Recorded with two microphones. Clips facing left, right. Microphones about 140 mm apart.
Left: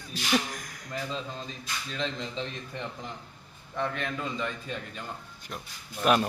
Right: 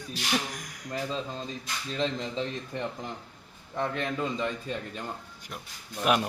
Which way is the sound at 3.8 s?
35° right (ahead or behind).